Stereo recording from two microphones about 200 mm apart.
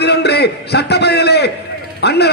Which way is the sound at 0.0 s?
55° left (ahead or behind).